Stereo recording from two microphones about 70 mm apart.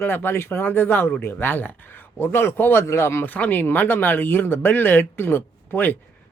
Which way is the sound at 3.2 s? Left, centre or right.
Left.